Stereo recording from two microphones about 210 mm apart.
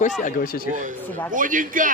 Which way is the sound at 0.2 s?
40° left (ahead or behind).